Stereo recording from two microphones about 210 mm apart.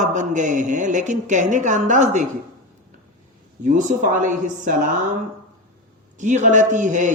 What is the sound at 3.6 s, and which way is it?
Speech, 35° right (ahead or behind).